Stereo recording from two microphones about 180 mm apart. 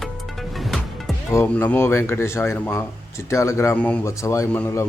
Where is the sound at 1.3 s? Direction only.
10° left (ahead or behind).